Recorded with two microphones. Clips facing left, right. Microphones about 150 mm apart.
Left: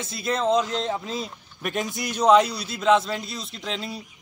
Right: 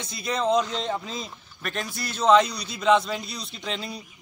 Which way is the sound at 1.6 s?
15° left (ahead or behind).